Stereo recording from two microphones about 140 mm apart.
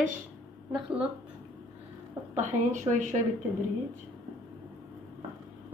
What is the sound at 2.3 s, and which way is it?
Speech, 60° right (ahead or behind).